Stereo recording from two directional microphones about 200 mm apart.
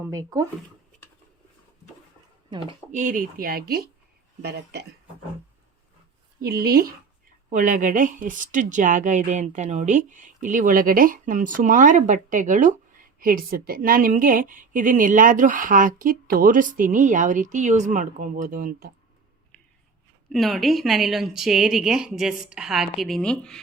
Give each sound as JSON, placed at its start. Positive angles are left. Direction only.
{"t": 0.0, "sound": "speech", "side_deg": -15}
{"t": 2.9, "sound": "speech", "side_deg": -40}
{"t": 6.4, "sound": "a woman's voice", "side_deg": -50}
{"t": 20.3, "sound": "a woman's voice", "side_deg": 0}